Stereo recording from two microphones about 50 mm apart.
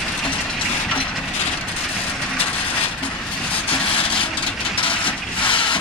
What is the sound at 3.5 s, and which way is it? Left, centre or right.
Vehicle, left.